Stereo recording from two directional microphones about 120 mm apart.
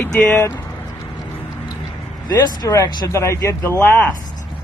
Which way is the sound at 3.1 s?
25° left (ahead or behind).